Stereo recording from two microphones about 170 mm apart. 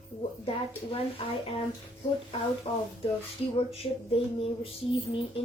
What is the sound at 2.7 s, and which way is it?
A woman's voice, 35° left (ahead or behind).